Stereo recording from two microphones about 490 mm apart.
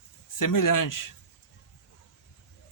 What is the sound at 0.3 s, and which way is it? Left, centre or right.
Speech, left.